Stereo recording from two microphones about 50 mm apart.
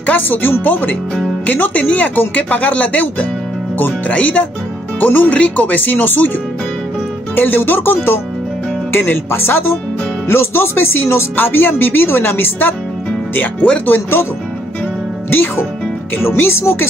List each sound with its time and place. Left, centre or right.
0.0 s speech: left
7.3 s speech: left
13.8 s speech: left
15.2 s speech: left